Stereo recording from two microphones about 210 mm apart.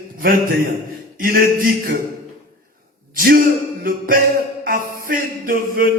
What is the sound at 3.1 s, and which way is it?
A man's voice, 45° right (ahead or behind).